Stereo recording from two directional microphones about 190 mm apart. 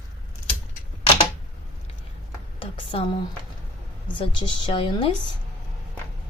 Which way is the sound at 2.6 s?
25° left (ahead or behind).